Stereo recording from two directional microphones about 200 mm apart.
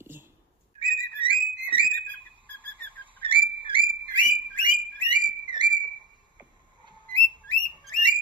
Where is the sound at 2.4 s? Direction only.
10° left (ahead or behind).